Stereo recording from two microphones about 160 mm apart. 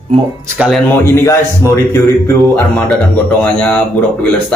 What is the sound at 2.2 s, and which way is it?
Speech, 5° left (ahead or behind).